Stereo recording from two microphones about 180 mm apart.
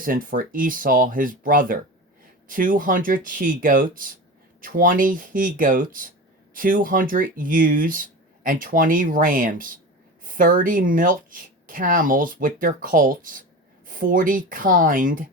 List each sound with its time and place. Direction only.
0.0 s speech: 50° right (ahead or behind)